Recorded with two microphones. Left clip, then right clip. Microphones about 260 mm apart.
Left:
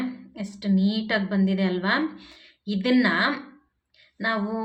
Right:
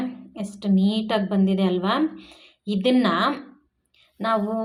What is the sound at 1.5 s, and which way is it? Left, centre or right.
A woman's voice, left.